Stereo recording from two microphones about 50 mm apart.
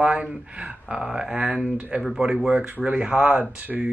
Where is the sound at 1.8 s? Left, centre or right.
Right.